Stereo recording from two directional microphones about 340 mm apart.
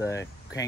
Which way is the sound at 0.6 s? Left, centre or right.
Centre.